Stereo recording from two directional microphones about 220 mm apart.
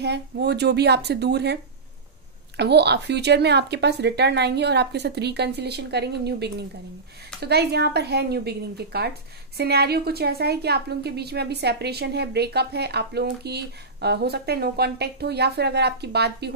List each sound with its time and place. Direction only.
0.0 s a woman's voice: 50° right (ahead or behind)